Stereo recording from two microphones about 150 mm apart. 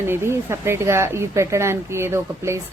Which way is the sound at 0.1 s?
15° right (ahead or behind).